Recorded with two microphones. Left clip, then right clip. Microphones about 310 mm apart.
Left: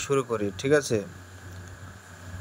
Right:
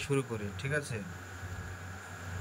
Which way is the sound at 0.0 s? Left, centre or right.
Centre.